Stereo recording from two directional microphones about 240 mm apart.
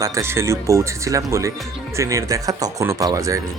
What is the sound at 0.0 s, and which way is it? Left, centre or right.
Speech, centre.